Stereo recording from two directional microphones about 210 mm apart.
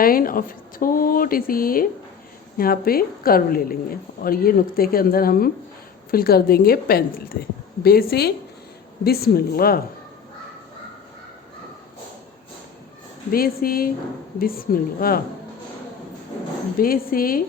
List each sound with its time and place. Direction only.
0.0 s speech: 45° left (ahead or behind)
13.3 s speech: 45° left (ahead or behind)
16.7 s speech: 45° left (ahead or behind)